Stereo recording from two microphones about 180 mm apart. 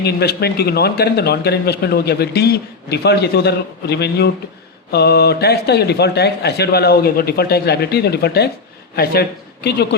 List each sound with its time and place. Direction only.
0.0 s speech: 65° left (ahead or behind)